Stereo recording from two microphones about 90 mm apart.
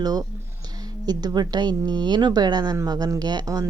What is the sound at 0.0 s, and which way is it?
Speech, 45° right (ahead or behind).